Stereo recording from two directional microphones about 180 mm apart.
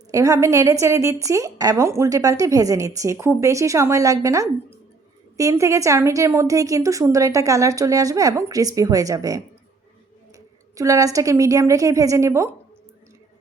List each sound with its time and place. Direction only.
0.1 s a woman's voice: 15° right (ahead or behind)